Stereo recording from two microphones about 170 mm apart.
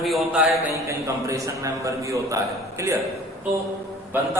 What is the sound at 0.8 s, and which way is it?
A man's voice, 15° right (ahead or behind).